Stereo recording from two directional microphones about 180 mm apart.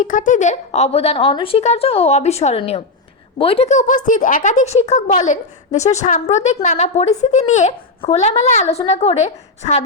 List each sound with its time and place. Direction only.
0.0 s a woman's voice: 45° left (ahead or behind)